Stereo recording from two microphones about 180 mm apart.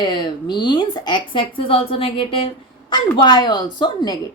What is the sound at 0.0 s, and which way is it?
Speech, 25° left (ahead or behind).